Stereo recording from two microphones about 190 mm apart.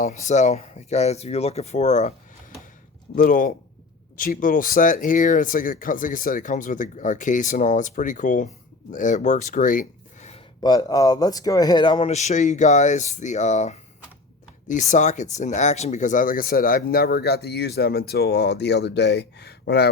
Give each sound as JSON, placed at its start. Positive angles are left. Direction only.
{"t": 0.0, "sound": "speech", "side_deg": 40}
{"t": 3.2, "sound": "speech", "side_deg": 45}
{"t": 10.6, "sound": "speech", "side_deg": 20}